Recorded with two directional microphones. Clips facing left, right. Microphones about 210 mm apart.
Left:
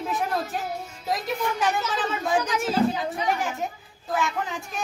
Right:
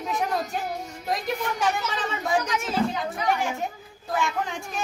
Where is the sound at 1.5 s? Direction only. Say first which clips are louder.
Left 1 dB; centre (ahead or behind).